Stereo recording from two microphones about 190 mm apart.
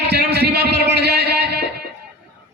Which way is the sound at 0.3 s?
60° right (ahead or behind).